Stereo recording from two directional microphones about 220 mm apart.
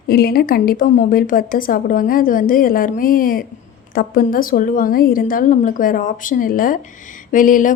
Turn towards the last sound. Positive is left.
turn(degrees=35)  # may be behind; listen again after turning